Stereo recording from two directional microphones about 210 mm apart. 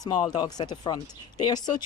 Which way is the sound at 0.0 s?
20° left (ahead or behind).